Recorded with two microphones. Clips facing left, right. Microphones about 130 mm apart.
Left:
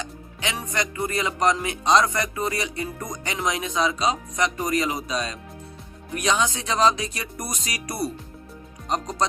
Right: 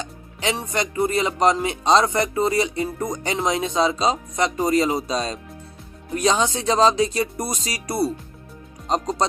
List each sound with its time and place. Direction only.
0.0 s speech: 30° right (ahead or behind)